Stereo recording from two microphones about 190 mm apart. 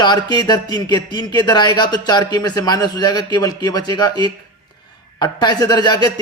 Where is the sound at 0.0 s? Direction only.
20° left (ahead or behind).